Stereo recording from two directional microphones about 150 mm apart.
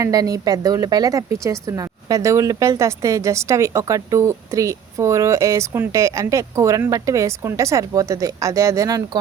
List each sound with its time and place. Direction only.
0.0 s speech: 25° right (ahead or behind)